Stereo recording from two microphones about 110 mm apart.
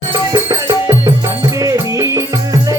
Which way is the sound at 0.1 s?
35° right (ahead or behind).